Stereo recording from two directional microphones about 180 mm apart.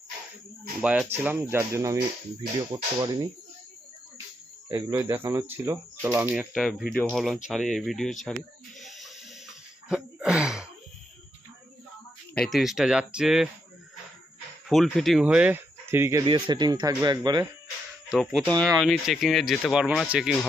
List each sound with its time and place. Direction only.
0.8 s speech: 5° right (ahead or behind); by 3.2 s 20° right (ahead or behind)
4.7 s speech: 20° right (ahead or behind); by 8.4 s centre (ahead or behind)
8.8 s music: centre (ahead or behind)
9.9 s a sound: 5° right (ahead or behind)
12.3 s speech: 5° left (ahead or behind)
14.7 s speech: centre (ahead or behind)
16.2 s speech: 25° right (ahead or behind)
18.1 s speech: centre (ahead or behind)